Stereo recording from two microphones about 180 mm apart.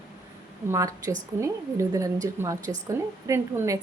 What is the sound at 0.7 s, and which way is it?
A woman's voice, 20° right (ahead or behind).